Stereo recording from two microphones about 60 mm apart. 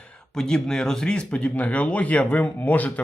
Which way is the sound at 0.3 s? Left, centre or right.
Centre.